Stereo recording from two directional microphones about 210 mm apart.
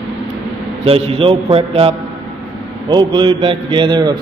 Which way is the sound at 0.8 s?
25° right (ahead or behind).